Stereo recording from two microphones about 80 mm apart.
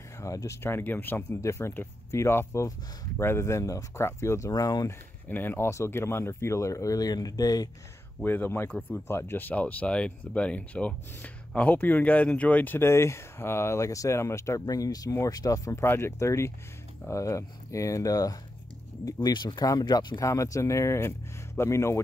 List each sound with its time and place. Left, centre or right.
0.2 s speech: left
4.5 s speech: left
5.3 s speech: left
8.2 s speech: left
9.0 s speech: left
15.8 s speech: left
19.2 s speech: left
20.2 s speech: left